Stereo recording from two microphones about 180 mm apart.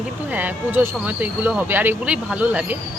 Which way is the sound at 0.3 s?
10° right (ahead or behind).